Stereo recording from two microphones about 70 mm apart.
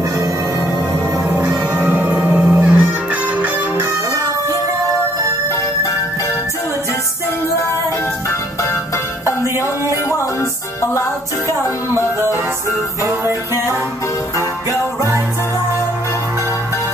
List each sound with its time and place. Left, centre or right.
1.3 s music: centre
10.8 s music: left
11.9 s music: right